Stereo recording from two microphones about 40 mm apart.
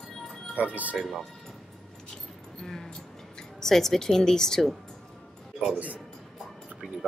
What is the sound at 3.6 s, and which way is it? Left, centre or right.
Speech, centre.